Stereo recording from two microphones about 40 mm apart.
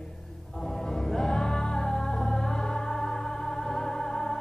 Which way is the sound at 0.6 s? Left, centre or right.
Centre.